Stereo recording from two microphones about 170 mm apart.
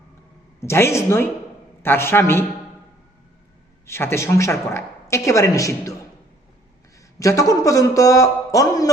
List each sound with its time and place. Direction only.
0.6 s a woman's voice: 15° left (ahead or behind)
3.8 s a woman's voice: 15° left (ahead or behind)
7.2 s speech: 20° left (ahead or behind)